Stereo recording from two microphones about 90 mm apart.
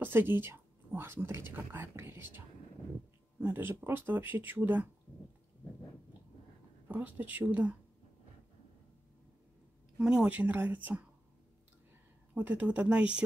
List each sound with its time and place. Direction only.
0.0 s speech: 20° right (ahead or behind)
6.9 s speech: 20° right (ahead or behind)
9.9 s speech: 10° right (ahead or behind)
12.4 s speech: 15° right (ahead or behind)